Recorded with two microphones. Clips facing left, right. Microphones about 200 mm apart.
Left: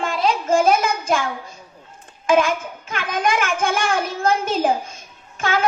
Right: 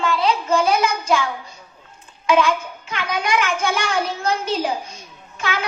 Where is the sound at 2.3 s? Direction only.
50° left (ahead or behind).